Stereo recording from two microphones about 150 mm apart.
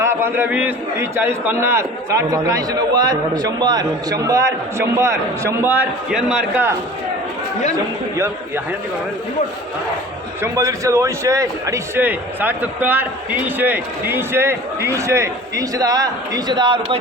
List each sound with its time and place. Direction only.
0.0 s a man's voice: 15° right (ahead or behind)
10.4 s a man's voice: 20° right (ahead or behind)